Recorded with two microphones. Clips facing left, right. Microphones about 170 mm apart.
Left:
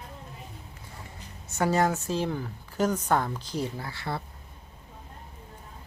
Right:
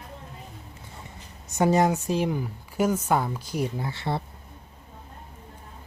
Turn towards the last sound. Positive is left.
turn(degrees=-25)  # may be behind; listen again after turning